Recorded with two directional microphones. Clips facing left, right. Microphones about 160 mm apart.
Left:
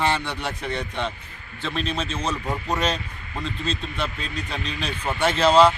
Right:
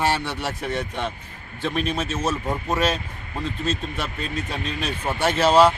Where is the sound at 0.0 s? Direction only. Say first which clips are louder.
Right 1 dB; 5° right (ahead or behind).